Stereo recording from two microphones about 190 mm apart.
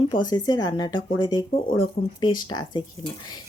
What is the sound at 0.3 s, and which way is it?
Speech, 20° left (ahead or behind).